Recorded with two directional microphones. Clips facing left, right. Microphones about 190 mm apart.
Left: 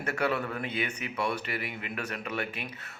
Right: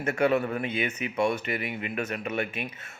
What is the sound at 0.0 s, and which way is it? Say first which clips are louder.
A man's voice: right 6 dB; 25° right (ahead or behind).